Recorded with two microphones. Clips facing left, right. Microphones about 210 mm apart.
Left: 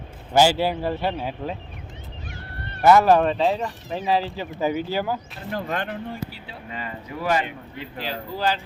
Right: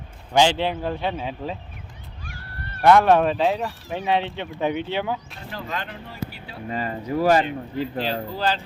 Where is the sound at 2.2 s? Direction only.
20° left (ahead or behind).